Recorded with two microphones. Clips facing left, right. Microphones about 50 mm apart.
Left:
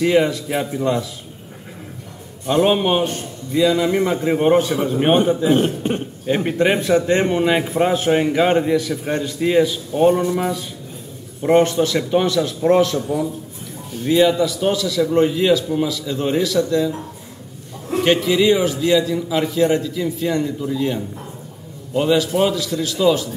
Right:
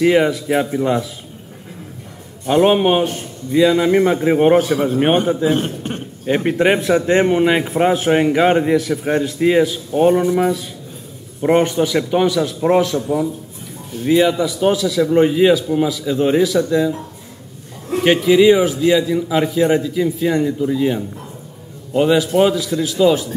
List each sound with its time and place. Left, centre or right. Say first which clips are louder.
0.0 s a man's voice: right 2 dB; centre
2.4 s a man's voice: right 3 dB; centre
3.5 s a man's voice: right 3 dB; right
6.2 s a man's voice: right 3 dB; centre
14.0 s a man's voice: right 1 dB; centre
18.0 s a man's voice: right 5 dB; centre